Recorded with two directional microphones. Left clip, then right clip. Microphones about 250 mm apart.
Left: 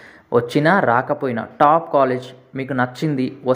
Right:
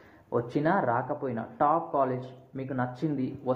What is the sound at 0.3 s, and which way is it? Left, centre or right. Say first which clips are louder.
Speech: left 11 dB; left.